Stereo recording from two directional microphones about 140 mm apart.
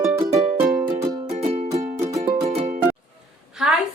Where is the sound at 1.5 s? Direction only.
65° right (ahead or behind).